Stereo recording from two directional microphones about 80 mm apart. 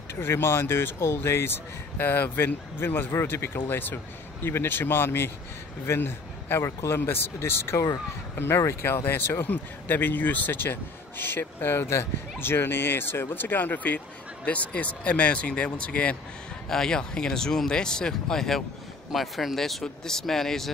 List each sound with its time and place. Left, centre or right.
0.1 s speech: left; by 20.7 s centre